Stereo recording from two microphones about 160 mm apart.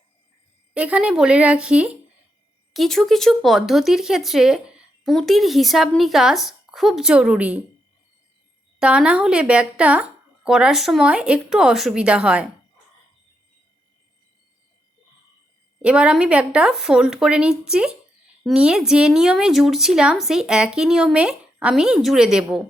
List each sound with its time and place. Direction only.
0.7 s speech: 5° right (ahead or behind)
8.8 s speech: 5° right (ahead or behind)
15.8 s speech: 5° right (ahead or behind)